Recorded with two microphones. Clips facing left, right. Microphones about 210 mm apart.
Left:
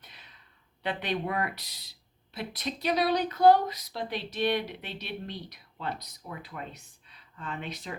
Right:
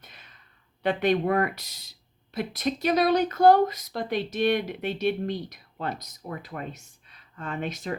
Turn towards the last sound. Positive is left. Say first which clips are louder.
# right 6 dB
turn(degrees=-45)  # may be behind; listen again after turning